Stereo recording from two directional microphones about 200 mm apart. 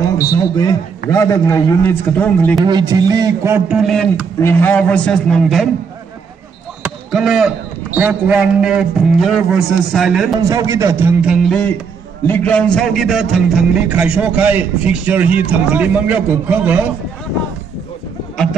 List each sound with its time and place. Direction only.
0.0 s a man's voice: 15° left (ahead or behind)
2.6 s speech: 20° right (ahead or behind); by 5.7 s centre (ahead or behind)
6.8 s speech: 5° right (ahead or behind)
10.5 s speech: 15° right (ahead or behind)
11.4 s speech: 5° left (ahead or behind)